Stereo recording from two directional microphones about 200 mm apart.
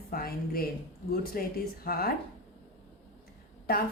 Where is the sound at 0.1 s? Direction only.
45° left (ahead or behind).